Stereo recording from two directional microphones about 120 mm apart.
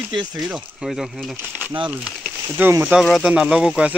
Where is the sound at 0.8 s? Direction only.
Centre (ahead or behind).